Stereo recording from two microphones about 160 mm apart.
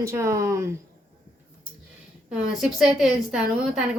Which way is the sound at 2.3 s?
5° right (ahead or behind).